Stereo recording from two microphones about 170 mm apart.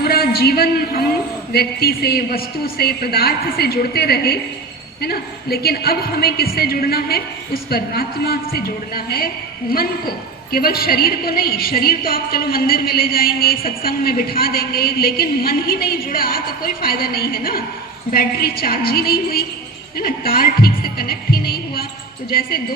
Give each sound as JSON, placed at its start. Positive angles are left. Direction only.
{"t": 0.0, "sound": "a woman's voice", "side_deg": 65}